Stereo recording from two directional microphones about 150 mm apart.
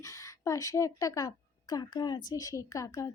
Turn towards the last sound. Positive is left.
turn(degrees=20)  # may be behind; listen again after turning